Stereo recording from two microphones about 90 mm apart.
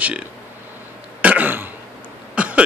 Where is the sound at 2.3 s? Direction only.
15° right (ahead or behind).